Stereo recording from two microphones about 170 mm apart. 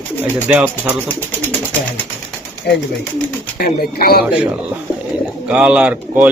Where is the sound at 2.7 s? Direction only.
75° left (ahead or behind).